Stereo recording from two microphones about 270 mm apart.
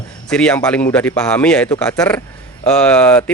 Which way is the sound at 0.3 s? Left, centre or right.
Centre.